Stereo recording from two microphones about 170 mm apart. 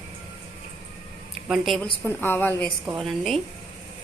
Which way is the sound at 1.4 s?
Centre (ahead or behind).